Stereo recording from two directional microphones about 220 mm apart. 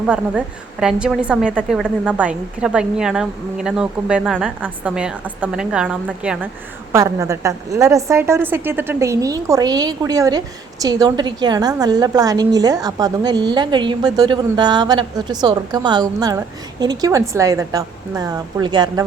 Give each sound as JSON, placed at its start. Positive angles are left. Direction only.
{"t": 0.0, "sound": "a woman's voice", "side_deg": -5}